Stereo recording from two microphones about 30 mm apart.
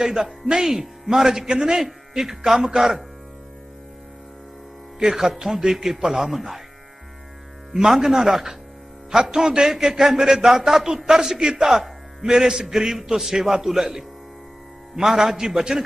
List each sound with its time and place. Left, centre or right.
0.0 s a man's voice: right
0.7 s a man's voice: centre
1.8 s a man's voice: centre
4.9 s a man's voice: right
5.5 s a man's voice: centre
7.7 s a man's voice: centre
11.6 s a man's voice: centre
12.6 s a man's voice: centre